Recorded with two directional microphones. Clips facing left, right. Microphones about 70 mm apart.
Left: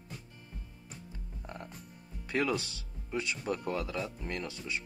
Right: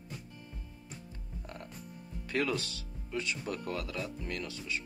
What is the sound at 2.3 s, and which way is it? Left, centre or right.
Speech, left.